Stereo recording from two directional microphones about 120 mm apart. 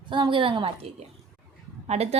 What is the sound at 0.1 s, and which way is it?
Speech, 45° right (ahead or behind).